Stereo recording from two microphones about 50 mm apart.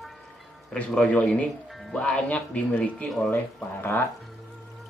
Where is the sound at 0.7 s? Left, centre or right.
Left.